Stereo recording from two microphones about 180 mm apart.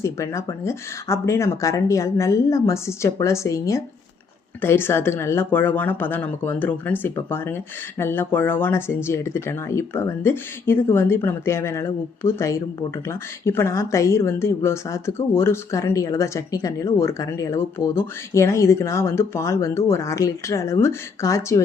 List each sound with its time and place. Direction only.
0.0 s speech: 15° left (ahead or behind)